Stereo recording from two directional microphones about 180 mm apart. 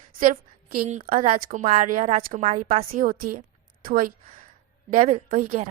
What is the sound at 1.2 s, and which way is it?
A woman's voice, 40° right (ahead or behind).